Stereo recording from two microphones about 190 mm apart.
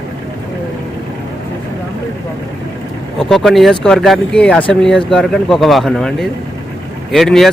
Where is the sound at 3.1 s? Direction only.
Centre (ahead or behind).